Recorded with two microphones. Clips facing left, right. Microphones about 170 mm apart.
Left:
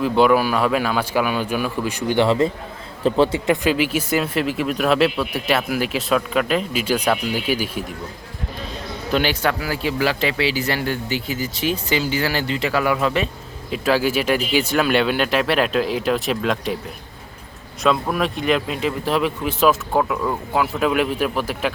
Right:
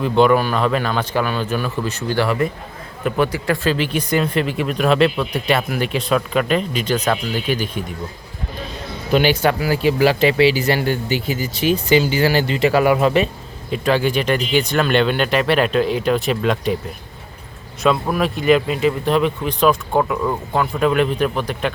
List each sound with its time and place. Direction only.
0.0 s a man's voice: 5° left (ahead or behind)
9.1 s speech: 5° right (ahead or behind)
10.0 s speech: 30° right (ahead or behind)
10.4 s speech: centre (ahead or behind)
12.2 s speech: 30° right (ahead or behind)
13.7 s speech: centre (ahead or behind)
17.8 s speech: centre (ahead or behind)